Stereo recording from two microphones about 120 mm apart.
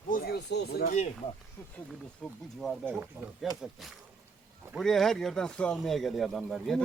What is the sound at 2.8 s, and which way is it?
Speech, 15° right (ahead or behind).